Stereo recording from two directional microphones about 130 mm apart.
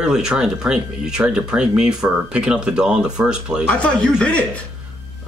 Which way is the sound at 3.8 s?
10° left (ahead or behind).